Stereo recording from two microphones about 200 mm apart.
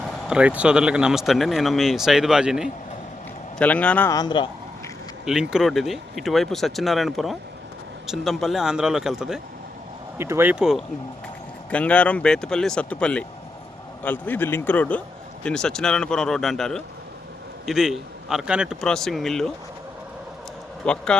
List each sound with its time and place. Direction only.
0.3 s speech: 5° right (ahead or behind)
4.1 s speech: 20° left (ahead or behind)
5.2 s speech: 5° right (ahead or behind)
20.8 s speech: 5° left (ahead or behind)